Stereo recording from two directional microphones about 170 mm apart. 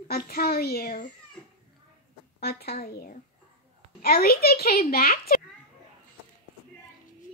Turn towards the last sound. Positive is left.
turn(degrees=60)  # may be behind; listen again after turning